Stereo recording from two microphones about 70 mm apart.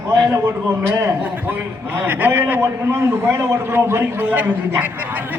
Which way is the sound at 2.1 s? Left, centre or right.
Right.